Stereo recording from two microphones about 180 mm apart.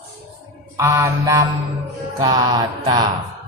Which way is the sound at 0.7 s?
15° right (ahead or behind).